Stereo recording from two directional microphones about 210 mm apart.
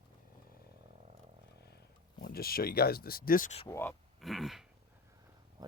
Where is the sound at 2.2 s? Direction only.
45° left (ahead or behind).